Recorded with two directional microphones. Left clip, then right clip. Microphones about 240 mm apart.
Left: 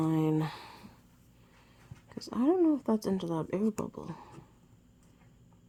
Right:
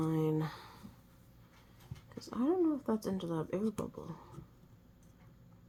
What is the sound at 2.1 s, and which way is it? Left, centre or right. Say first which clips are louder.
Speech: left 5 dB; left.